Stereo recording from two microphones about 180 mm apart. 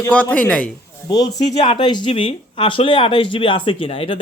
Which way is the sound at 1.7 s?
25° left (ahead or behind).